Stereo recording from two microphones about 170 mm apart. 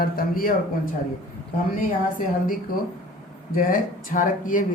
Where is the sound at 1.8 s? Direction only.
55° left (ahead or behind).